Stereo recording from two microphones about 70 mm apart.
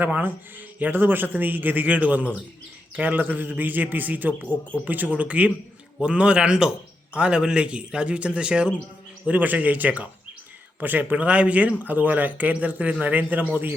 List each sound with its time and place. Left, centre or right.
0.0 s a man's voice: right